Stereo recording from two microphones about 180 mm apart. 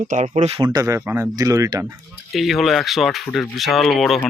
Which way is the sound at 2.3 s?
Centre (ahead or behind).